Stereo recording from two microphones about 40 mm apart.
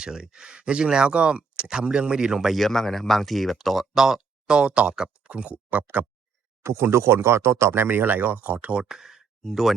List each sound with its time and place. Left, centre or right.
0.0 s speech: centre
2.5 s speech: centre; by 6.1 s right
6.6 s speech: right
8.9 s speech: centre